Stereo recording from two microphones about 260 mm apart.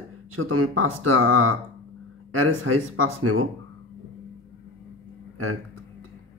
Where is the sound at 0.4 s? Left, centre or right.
Right.